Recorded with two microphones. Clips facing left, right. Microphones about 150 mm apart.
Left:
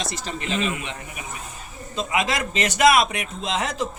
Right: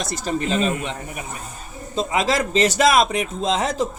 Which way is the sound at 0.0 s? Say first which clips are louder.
Right 6 dB; 45° right (ahead or behind).